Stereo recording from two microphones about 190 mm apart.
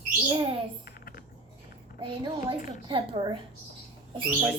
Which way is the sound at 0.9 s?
50° left (ahead or behind).